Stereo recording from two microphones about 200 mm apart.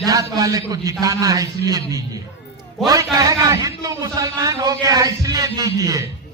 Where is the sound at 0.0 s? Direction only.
15° right (ahead or behind).